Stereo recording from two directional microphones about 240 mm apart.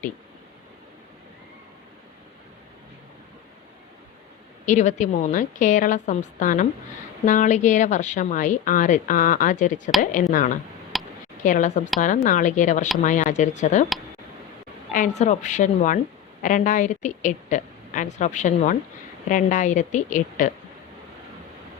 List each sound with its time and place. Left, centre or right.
4.6 s a woman's voice: left
10.9 s tick: centre
11.4 s a woman's voice: left
14.9 s a woman's voice: left